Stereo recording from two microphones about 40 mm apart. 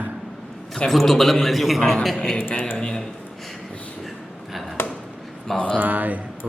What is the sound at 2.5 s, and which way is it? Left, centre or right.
Speech, left.